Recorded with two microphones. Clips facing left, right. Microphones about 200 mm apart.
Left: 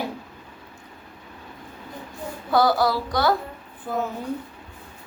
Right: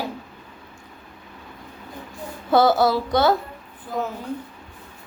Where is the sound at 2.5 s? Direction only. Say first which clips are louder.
Right 3 dB; 25° right (ahead or behind).